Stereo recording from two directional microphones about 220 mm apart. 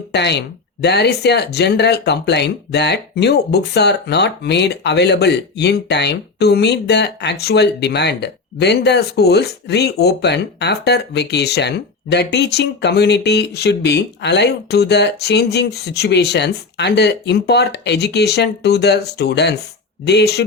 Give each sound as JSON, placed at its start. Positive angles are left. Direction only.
{"t": 0.1, "sound": "speech", "side_deg": 50}